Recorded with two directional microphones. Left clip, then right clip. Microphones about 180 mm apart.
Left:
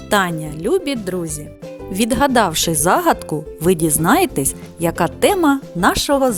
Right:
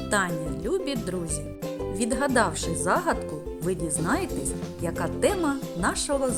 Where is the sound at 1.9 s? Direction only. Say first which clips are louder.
Left 10 dB; 60° left (ahead or behind).